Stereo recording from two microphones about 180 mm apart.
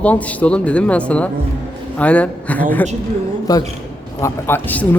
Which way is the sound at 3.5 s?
20° left (ahead or behind).